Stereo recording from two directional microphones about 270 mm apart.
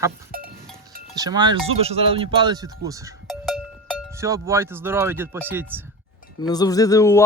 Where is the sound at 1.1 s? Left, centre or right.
Centre.